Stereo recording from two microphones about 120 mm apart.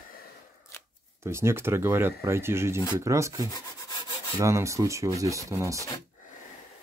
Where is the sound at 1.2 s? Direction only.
20° right (ahead or behind).